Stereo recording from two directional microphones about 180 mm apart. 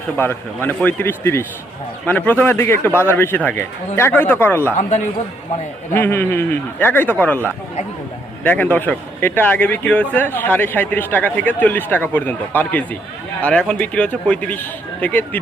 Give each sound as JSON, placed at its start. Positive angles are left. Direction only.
{"t": 0.2, "sound": "a man's voice", "side_deg": 10}
{"t": 4.8, "sound": "a man's voice", "side_deg": 40}
{"t": 5.9, "sound": "a man's voice", "side_deg": 10}